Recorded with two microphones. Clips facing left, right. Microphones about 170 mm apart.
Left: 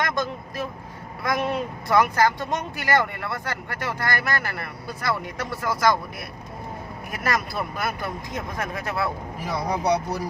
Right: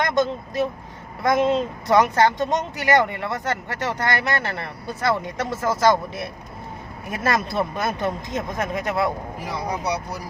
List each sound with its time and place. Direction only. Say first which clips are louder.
0.0 s speech: right 5 dB; 25° right (ahead or behind)